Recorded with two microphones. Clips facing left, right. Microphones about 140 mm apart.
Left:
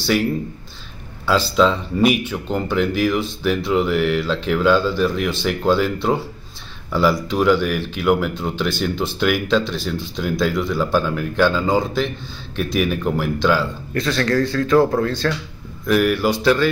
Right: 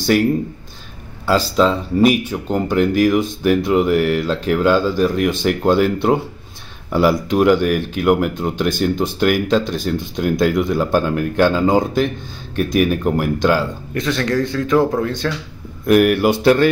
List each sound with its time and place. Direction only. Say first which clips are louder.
0.0 s speech: right 4 dB; 50° right (ahead or behind)
1.6 s a man's voice: right 2 dB; 5° right (ahead or behind)
2.7 s speech: right 5 dB; 45° right (ahead or behind)
13.9 s a man's voice: even; 20° right (ahead or behind)
15.9 s speech: right 4 dB; 55° right (ahead or behind)